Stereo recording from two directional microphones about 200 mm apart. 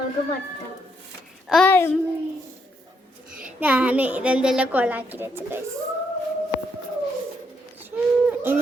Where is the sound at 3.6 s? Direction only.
5° right (ahead or behind).